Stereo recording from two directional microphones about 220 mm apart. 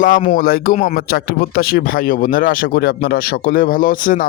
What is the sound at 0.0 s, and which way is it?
Speech, 35° left (ahead or behind).